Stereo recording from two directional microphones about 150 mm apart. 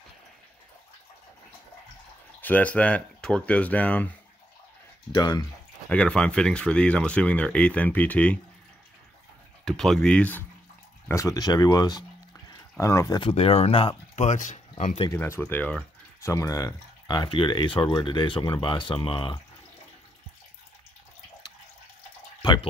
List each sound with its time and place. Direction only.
2.4 s speech: 10° left (ahead or behind)
5.1 s speech: 25° left (ahead or behind)
5.9 s speech: 5° left (ahead or behind)
9.7 s speech: centre (ahead or behind)
11.1 s speech: 20° left (ahead or behind)
12.4 s a sound: 20° left (ahead or behind)
13.2 s speech: 40° left (ahead or behind)
14.1 s speech: 55° left (ahead or behind)
15.1 s speech: 15° left (ahead or behind)
16.3 s speech: 20° left (ahead or behind)
22.4 s speech: 30° left (ahead or behind)